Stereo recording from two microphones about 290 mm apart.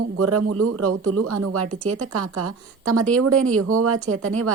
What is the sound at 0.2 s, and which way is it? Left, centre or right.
Speech, right.